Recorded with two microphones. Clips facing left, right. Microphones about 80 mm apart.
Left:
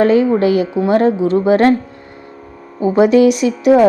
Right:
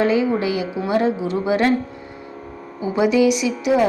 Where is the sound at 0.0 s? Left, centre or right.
Left.